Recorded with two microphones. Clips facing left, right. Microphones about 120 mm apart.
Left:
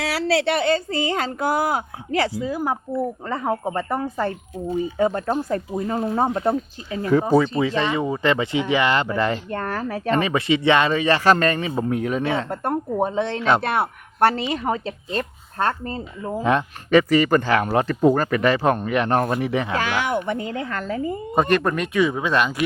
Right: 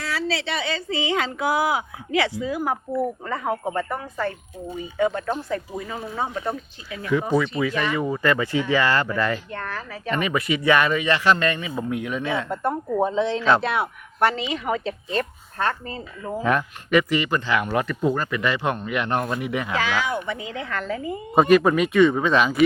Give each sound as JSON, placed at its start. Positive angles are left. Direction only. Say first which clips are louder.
{"t": 0.0, "sound": "speech", "louder": "left 6 dB", "side_deg": 75}
{"t": 6.5, "sound": "speech", "louder": "left 7 dB", "side_deg": 35}
{"t": 9.5, "sound": "speech", "louder": "left 6 dB", "side_deg": 45}
{"t": 10.1, "sound": "speech", "louder": "left 3 dB", "side_deg": 30}
{"t": 12.6, "sound": "a man's voice", "louder": "right 1 dB", "side_deg": 60}
{"t": 14.3, "sound": "speech", "louder": "left 2 dB", "side_deg": 40}
{"t": 16.2, "sound": "speech", "louder": "left 2 dB", "side_deg": 25}
{"t": 19.7, "sound": "speech", "louder": "left 2 dB", "side_deg": 55}
{"t": 21.3, "sound": "speech", "louder": "right 4 dB", "side_deg": -5}